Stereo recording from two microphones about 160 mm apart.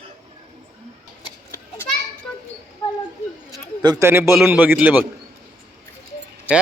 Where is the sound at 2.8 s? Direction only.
30° left (ahead or behind).